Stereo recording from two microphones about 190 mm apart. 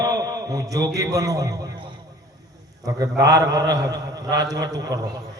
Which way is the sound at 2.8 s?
20° right (ahead or behind).